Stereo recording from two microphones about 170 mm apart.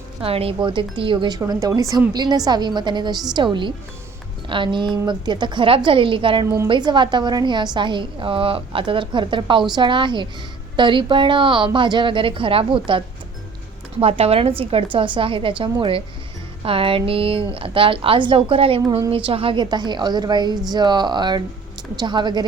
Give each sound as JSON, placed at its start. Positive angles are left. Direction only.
{"t": 0.2, "sound": "a woman's voice", "side_deg": -35}
{"t": 14.0, "sound": "a woman's voice", "side_deg": -35}